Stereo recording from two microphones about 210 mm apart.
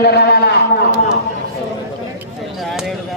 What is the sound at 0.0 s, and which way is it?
Speech, 50° left (ahead or behind).